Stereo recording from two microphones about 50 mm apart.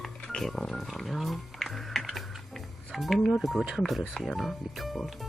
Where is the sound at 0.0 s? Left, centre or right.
Centre.